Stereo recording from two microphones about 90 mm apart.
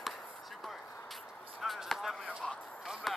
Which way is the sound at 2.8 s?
5° right (ahead or behind).